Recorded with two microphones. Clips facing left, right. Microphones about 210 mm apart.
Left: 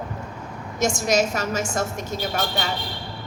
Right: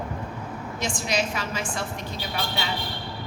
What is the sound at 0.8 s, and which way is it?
A woman's voice, 45° left (ahead or behind).